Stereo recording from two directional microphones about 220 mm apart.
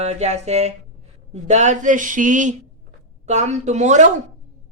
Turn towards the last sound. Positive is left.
turn(degrees=-35)  # may be behind; listen again after turning